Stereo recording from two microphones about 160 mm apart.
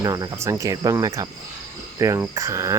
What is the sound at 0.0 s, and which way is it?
Cricket, 20° right (ahead or behind).